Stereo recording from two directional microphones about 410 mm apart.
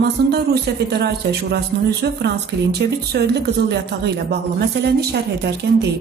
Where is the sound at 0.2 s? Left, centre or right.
Right.